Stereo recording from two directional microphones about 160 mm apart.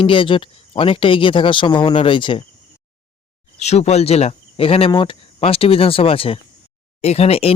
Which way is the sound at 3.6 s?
45° left (ahead or behind).